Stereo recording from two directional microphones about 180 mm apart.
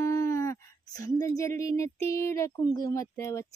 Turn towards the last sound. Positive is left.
turn(degrees=15)  # may be behind; listen again after turning